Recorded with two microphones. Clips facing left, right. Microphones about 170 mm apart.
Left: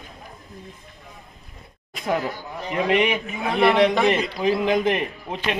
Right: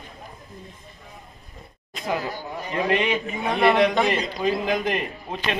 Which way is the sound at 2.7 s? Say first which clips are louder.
Left 2 dB; 15° left (ahead or behind).